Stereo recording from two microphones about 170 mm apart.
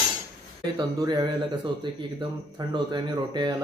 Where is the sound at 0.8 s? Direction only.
25° right (ahead or behind).